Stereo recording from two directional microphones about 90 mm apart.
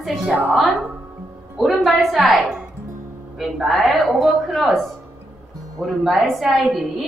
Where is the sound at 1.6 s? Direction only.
Centre (ahead or behind).